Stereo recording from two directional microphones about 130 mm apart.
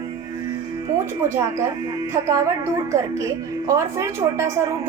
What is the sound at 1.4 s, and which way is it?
A woman's voice, 20° right (ahead or behind).